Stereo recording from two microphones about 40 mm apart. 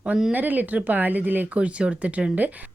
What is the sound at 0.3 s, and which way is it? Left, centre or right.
Speech, right.